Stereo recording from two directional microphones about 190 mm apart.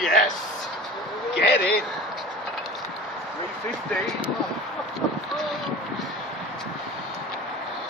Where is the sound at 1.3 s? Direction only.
60° left (ahead or behind).